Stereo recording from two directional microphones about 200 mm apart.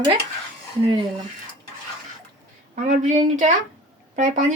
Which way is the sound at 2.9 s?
40° right (ahead or behind).